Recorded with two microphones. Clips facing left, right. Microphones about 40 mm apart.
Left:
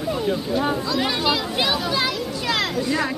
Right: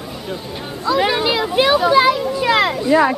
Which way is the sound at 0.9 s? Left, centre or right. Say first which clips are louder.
Right 5 dB; centre.